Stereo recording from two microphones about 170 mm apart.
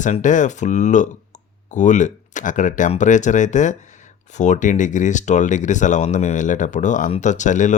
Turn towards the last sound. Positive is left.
turn(degrees=45)  # may be behind; listen again after turning